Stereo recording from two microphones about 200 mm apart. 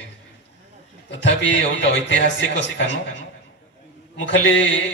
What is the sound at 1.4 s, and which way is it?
Speech, 65° left (ahead or behind).